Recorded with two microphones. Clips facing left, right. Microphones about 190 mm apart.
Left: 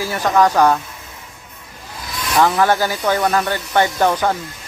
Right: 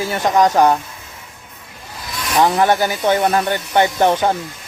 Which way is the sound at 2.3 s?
20° right (ahead or behind).